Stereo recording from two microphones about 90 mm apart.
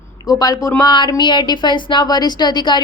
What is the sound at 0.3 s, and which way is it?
Speech, 45° left (ahead or behind).